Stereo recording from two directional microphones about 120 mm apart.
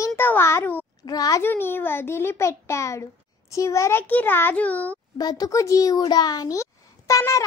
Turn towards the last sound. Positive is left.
turn(degrees=25)  # may be behind; listen again after turning